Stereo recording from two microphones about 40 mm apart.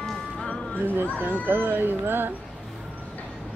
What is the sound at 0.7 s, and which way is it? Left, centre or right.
Speech, right.